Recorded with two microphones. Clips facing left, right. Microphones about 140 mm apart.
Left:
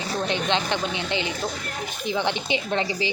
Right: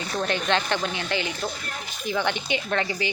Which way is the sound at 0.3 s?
20° left (ahead or behind).